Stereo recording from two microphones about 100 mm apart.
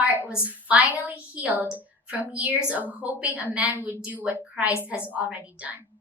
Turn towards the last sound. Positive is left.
turn(degrees=-15)  # may be behind; listen again after turning